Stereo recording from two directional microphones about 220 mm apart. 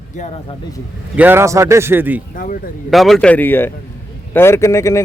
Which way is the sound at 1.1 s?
10° right (ahead or behind).